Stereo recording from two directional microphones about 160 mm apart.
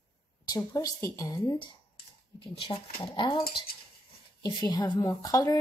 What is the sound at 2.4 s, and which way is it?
A woman's voice, 35° left (ahead or behind).